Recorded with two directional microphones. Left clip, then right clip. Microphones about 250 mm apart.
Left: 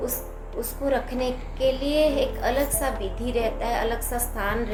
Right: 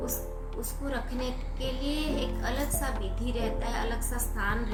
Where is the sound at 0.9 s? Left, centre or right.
Centre.